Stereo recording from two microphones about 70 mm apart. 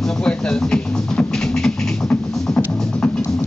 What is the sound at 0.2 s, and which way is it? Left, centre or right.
Music, centre.